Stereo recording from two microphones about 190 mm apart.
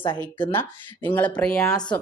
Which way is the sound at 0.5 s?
10° left (ahead or behind).